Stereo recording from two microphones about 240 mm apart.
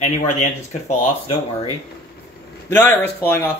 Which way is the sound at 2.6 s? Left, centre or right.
Centre.